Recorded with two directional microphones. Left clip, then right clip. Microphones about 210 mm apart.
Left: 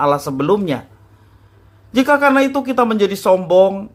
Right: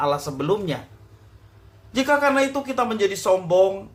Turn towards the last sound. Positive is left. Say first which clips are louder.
# left 6 dB
turn(degrees=35)  # may be behind; listen again after turning